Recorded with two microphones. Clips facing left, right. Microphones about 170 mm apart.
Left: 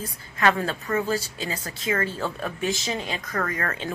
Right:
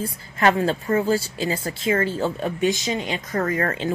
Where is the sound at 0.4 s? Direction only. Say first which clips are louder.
Right 4 dB; 30° right (ahead or behind).